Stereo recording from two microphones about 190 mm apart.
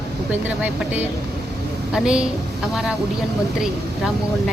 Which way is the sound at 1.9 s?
5° right (ahead or behind).